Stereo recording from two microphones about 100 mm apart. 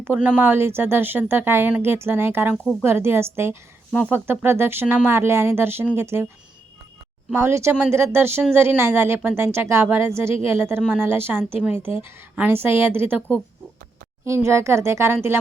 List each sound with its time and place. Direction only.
0.0 s speech: 15° right (ahead or behind)
7.3 s speech: 25° right (ahead or behind)
14.3 s speech: 30° right (ahead or behind)